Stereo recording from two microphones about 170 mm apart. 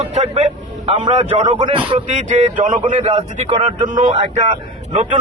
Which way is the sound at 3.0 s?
30° right (ahead or behind).